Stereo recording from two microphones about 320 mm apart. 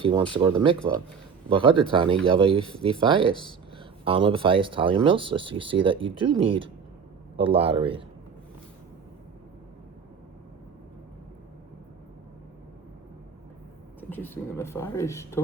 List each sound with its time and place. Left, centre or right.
0.0 s speech: centre
14.1 s speech: centre